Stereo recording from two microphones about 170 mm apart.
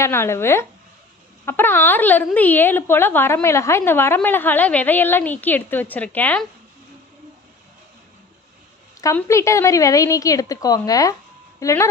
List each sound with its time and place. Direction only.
0.0 s speech: 15° left (ahead or behind)
9.1 s speech: 15° left (ahead or behind)